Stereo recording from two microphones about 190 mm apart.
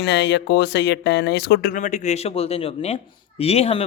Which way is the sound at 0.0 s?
65° left (ahead or behind).